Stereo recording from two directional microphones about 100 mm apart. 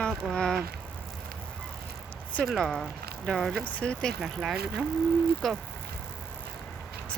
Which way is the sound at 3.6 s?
15° left (ahead or behind).